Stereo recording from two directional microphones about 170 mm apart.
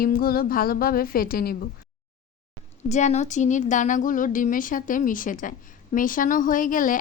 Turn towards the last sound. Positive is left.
turn(degrees=50)  # may be behind; listen again after turning